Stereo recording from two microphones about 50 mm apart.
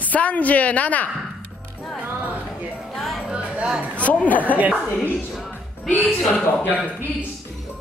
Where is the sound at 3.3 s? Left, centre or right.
Right.